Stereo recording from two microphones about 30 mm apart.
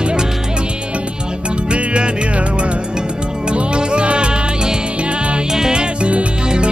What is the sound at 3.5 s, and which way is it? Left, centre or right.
Music, right.